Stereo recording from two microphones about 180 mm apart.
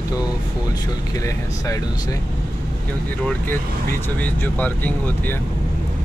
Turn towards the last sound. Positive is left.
turn(degrees=10)  # may be behind; listen again after turning